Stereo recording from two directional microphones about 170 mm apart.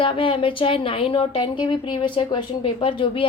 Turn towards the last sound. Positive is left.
turn(degrees=30)  # may be behind; listen again after turning